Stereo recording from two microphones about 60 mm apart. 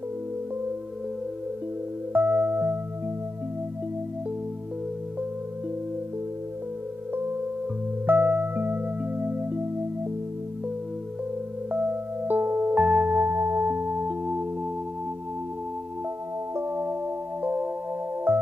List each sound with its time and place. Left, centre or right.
2.1 s music: right
8.1 s music: right
11.7 s music: right
13.2 s singing bowl: right
13.7 s singing bowl: right
16.5 s music: right